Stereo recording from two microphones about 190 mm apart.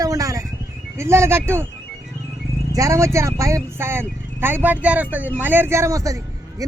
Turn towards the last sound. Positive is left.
turn(degrees=-15)  # may be behind; listen again after turning